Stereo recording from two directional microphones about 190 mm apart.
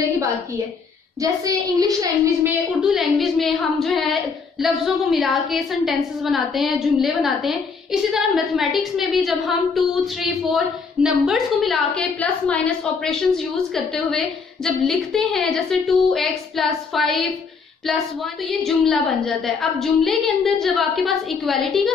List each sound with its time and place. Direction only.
1.2 s a woman's voice: 20° right (ahead or behind)
2.8 s speech: centre (ahead or behind)